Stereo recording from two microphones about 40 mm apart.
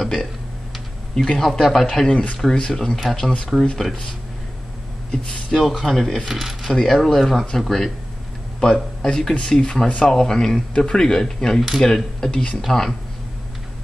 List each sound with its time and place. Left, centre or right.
0.0 s a sound: centre
1.1 s speech: centre
2.0 s speech: left
2.3 s speech: centre
3.7 s speech: centre
5.1 s speech: centre
6.7 s speech: centre
9.0 s speech: centre